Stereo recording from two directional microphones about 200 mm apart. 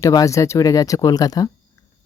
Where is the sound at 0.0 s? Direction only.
15° left (ahead or behind).